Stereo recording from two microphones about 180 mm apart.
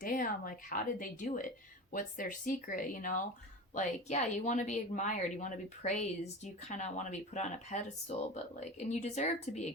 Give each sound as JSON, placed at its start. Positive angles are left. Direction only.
{"t": 0.0, "sound": "a woman's voice", "side_deg": 50}